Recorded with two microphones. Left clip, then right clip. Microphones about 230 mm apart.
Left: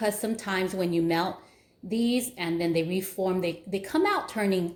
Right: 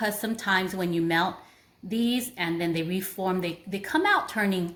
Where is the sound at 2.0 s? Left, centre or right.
Right.